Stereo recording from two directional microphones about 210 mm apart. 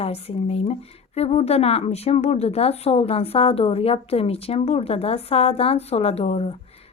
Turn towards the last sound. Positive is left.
turn(degrees=30)  # may be behind; listen again after turning